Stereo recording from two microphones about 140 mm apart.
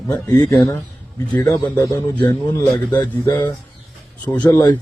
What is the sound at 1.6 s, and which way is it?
Speech, 30° left (ahead or behind).